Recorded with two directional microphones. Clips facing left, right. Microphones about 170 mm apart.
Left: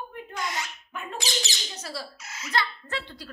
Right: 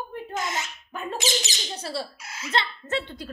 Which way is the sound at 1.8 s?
30° right (ahead or behind).